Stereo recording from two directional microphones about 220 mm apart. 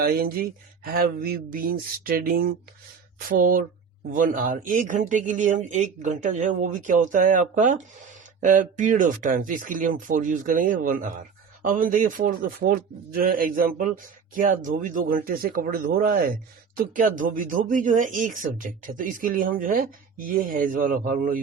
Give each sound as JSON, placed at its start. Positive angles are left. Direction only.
{"t": 0.0, "sound": "speech", "side_deg": -40}